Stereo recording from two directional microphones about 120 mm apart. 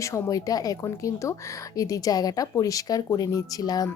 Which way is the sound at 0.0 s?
25° left (ahead or behind).